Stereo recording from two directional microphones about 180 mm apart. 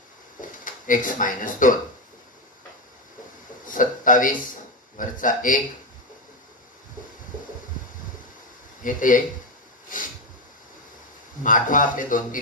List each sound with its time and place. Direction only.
0.4 s speech: 50° left (ahead or behind)
3.6 s a man's voice: 50° left (ahead or behind)
8.8 s a man's voice: 50° left (ahead or behind)
11.4 s a man's voice: 45° left (ahead or behind)